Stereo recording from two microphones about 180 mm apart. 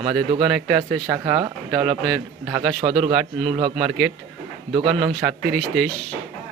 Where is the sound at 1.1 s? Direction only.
20° right (ahead or behind).